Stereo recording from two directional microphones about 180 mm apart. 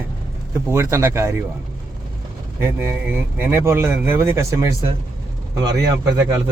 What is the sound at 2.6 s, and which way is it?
Speech, 15° right (ahead or behind).